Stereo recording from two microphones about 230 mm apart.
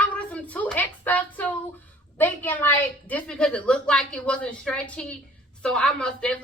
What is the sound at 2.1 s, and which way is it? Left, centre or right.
Speech, centre.